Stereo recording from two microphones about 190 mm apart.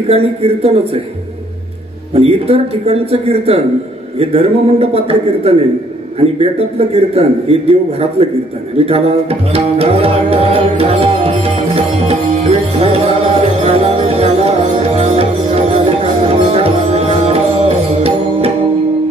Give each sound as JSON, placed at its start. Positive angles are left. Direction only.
{"t": 0.1, "sound": "a man's voice", "side_deg": -30}
{"t": 2.1, "sound": "a man's voice", "side_deg": -30}
{"t": 8.7, "sound": "music", "side_deg": -30}